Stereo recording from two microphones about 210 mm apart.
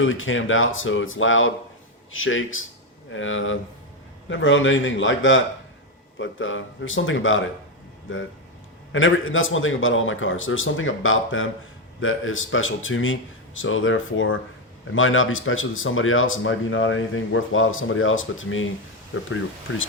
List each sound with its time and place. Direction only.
0.0 s a man's voice: 70° left (ahead or behind)